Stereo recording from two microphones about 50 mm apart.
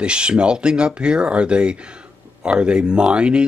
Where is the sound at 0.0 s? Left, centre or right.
Centre.